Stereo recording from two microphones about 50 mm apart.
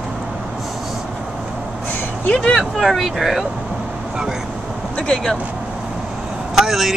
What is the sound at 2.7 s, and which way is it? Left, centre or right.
Speech, centre.